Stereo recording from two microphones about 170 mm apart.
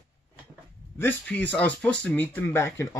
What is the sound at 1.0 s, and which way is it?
Speech, 10° left (ahead or behind).